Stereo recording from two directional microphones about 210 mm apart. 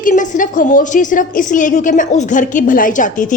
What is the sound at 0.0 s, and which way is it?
A woman's voice, 40° left (ahead or behind).